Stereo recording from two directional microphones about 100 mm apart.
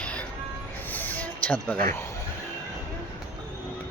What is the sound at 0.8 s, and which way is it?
Music, 15° left (ahead or behind).